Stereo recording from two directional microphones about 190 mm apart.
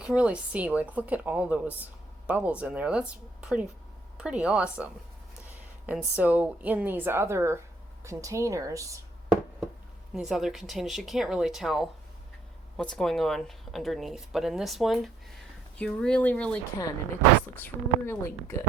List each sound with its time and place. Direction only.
0.0 s a woman's voice: 5° right (ahead or behind)
10.2 s speech: centre (ahead or behind); by 18.6 s 15° left (ahead or behind)